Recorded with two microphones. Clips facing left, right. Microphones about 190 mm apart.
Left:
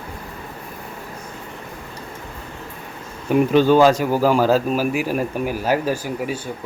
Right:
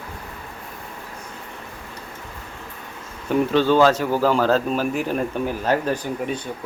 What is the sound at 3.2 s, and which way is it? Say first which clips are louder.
Speech: left 3 dB; 15° left (ahead or behind).